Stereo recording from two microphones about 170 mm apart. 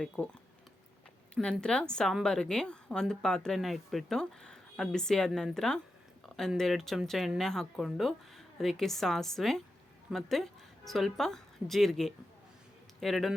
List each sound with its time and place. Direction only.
0.2 s speech: 5° left (ahead or behind)
1.4 s a woman's voice: 5° left (ahead or behind)